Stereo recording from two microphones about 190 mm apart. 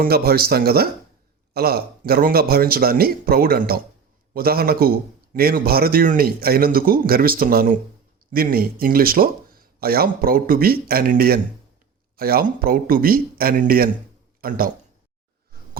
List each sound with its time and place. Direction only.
0.0 s a man's voice: 55° right (ahead or behind)